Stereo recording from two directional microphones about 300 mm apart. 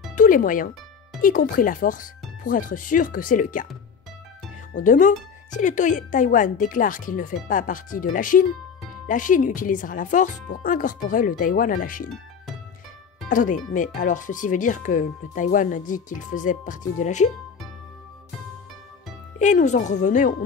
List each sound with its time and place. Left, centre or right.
0.1 s music: left
1.2 s speech: left
4.7 s speech: left
13.3 s speech: left
19.3 s speech: left